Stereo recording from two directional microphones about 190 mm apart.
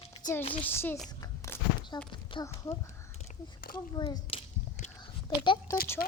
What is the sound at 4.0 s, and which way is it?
A child's voice, 20° left (ahead or behind).